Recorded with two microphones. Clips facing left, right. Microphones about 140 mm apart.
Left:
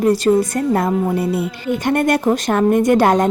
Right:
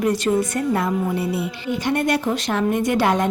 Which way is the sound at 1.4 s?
50° left (ahead or behind).